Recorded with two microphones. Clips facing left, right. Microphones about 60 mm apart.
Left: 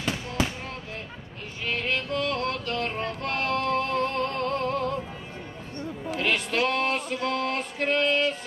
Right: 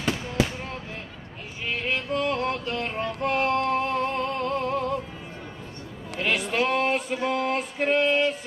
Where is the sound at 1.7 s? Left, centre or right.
Centre.